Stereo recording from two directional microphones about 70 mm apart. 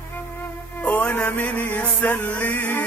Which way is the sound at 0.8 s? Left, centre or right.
Centre.